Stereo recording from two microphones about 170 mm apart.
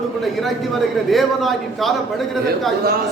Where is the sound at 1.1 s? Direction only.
Centre (ahead or behind).